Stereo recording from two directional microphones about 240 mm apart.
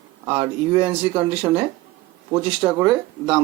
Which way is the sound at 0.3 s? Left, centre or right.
Right.